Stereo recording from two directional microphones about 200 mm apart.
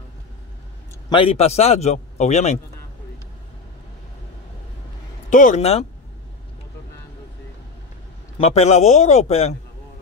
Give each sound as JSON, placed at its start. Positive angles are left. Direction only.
{"t": 1.1, "sound": "a man's voice", "side_deg": 30}
{"t": 5.3, "sound": "a man's voice", "side_deg": 40}
{"t": 8.4, "sound": "a man's voice", "side_deg": 30}